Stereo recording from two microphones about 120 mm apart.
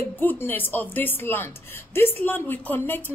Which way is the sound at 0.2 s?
15° left (ahead or behind).